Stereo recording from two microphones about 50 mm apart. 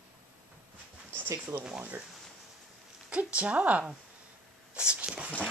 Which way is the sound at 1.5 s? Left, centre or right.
Right.